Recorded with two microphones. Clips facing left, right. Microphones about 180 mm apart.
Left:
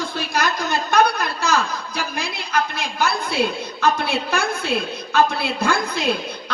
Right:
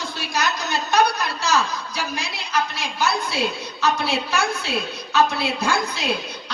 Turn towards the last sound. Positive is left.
turn(degrees=55)  # may be behind; listen again after turning